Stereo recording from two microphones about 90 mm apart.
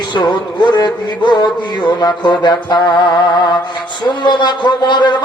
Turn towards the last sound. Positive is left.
turn(degrees=55)  # may be behind; listen again after turning